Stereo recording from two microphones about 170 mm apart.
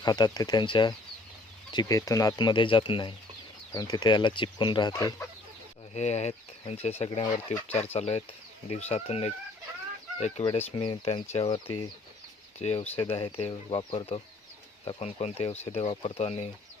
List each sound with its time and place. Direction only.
0.0 s speech: 25° left (ahead or behind)
5.9 s speech: 40° left (ahead or behind)